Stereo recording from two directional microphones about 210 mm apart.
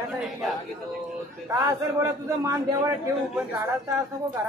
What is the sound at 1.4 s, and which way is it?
A man's voice, 15° right (ahead or behind).